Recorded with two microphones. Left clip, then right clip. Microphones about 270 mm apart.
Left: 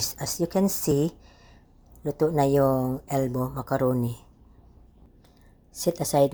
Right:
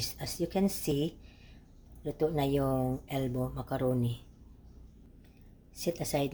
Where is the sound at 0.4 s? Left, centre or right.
Centre.